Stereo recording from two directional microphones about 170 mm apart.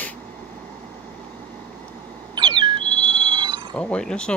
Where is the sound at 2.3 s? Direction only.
30° right (ahead or behind).